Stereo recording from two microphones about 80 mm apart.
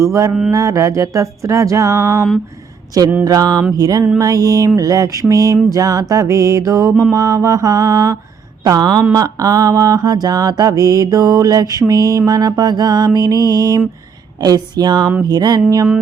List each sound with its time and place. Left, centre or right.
0.0 s music: right
3.2 s mantra: right
14.4 s speech: right